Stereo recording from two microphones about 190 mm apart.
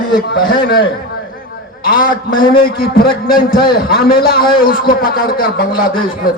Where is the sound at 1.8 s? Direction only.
50° left (ahead or behind).